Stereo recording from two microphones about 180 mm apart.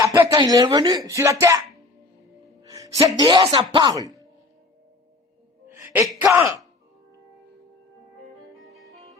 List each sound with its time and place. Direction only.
0.0 s speech: 20° right (ahead or behind)
2.6 s music: 20° right (ahead or behind)
3.0 s speech: 25° right (ahead or behind)
5.6 s gasp: 15° right (ahead or behind)